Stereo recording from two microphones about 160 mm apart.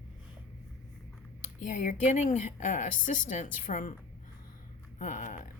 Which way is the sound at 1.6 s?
50° left (ahead or behind).